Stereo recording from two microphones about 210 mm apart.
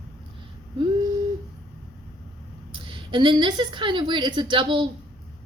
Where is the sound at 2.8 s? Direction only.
25° right (ahead or behind).